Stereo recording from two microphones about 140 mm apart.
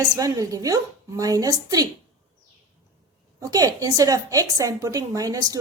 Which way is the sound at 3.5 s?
25° right (ahead or behind).